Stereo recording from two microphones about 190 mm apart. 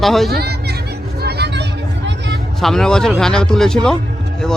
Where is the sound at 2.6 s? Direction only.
Centre (ahead or behind).